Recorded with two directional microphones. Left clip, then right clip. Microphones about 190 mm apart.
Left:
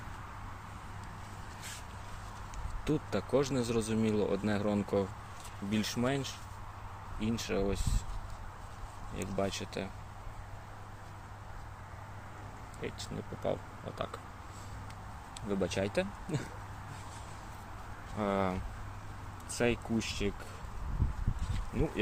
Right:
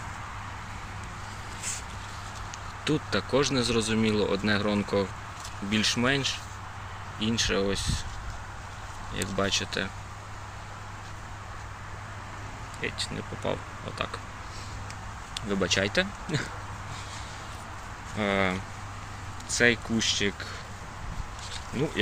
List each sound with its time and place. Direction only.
2.8 s speech: 15° left (ahead or behind)
9.1 s speech: 5° left (ahead or behind)
12.8 s speech: 15° left (ahead or behind)
15.4 s speech: 15° left (ahead or behind)
18.2 s speech: 10° left (ahead or behind)